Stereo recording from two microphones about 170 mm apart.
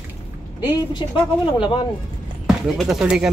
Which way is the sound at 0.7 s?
25° left (ahead or behind).